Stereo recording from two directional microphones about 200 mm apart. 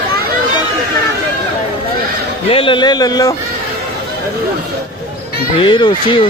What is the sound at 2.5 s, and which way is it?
Speech, 25° left (ahead or behind).